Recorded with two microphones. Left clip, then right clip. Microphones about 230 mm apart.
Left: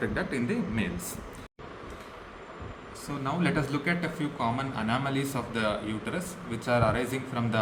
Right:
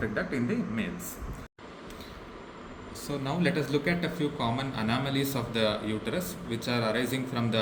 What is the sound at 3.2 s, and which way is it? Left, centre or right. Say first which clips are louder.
A man's voice: left 1 dB; centre.